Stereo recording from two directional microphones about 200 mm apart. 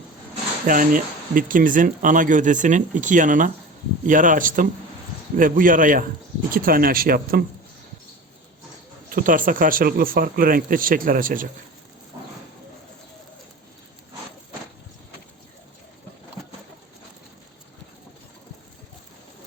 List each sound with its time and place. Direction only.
0.7 s speech: 45° right (ahead or behind)
9.0 s speech: 45° right (ahead or behind)